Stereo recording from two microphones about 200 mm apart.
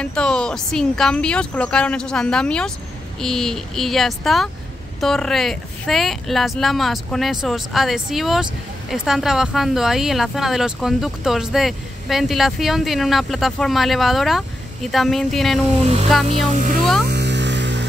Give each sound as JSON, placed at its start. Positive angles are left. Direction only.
{"t": 0.0, "sound": "speech", "side_deg": 5}
{"t": 15.8, "sound": "speech", "side_deg": -30}
{"t": 17.0, "sound": "a sound", "side_deg": -60}